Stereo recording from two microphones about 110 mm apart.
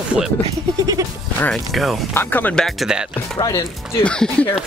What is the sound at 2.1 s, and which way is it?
Speech, 15° left (ahead or behind).